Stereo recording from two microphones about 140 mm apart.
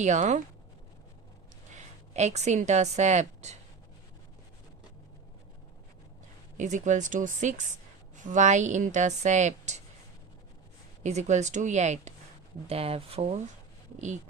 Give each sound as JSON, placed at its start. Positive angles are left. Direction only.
{"t": 0.0, "sound": "a woman's voice", "side_deg": -55}
{"t": 1.7, "sound": "a woman's voice", "side_deg": -55}
{"t": 6.6, "sound": "a woman's voice", "side_deg": -60}
{"t": 11.0, "sound": "a woman's voice", "side_deg": -55}
{"t": 12.6, "sound": "speech", "side_deg": -45}